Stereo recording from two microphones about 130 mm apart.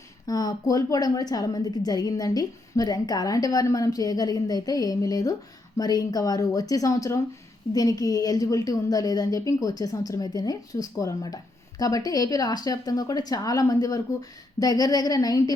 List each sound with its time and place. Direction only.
0.3 s a woman's voice: 30° left (ahead or behind)